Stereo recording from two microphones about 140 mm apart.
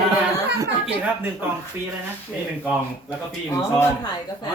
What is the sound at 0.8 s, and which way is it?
Speech, 10° right (ahead or behind).